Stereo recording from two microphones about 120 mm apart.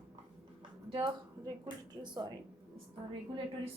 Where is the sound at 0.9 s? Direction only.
45° right (ahead or behind).